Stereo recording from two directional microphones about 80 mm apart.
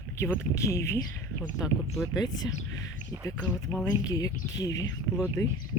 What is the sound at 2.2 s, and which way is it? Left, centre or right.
Speech, left.